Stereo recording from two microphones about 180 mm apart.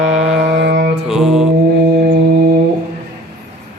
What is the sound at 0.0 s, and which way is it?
Mantra, 5° right (ahead or behind).